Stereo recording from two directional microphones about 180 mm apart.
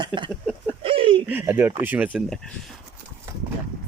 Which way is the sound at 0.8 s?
30° right (ahead or behind).